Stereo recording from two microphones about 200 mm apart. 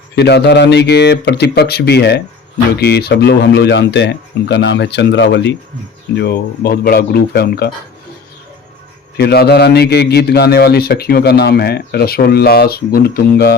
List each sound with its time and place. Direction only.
0.2 s a man's voice: 55° left (ahead or behind)
9.1 s a man's voice: 55° left (ahead or behind)